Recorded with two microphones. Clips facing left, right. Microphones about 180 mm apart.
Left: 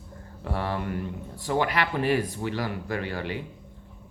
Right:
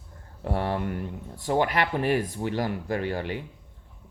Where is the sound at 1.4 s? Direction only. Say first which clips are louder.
Right 2 dB; 50° right (ahead or behind).